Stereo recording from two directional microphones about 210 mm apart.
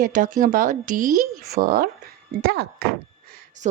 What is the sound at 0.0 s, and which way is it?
Speech, 40° right (ahead or behind).